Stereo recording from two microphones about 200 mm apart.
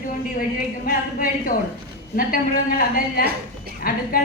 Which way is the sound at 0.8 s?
45° left (ahead or behind).